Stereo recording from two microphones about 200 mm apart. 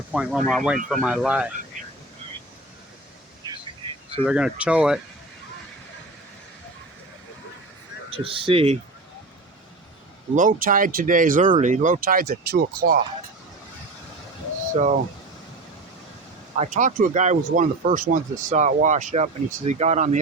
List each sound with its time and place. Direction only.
0.1 s speech: 5° right (ahead or behind)
4.3 s speech: 5° right (ahead or behind)
8.1 s speech: 25° right (ahead or behind)
10.3 s speech: 40° right (ahead or behind)
14.8 s speech: 35° right (ahead or behind)
16.6 s speech: 35° right (ahead or behind)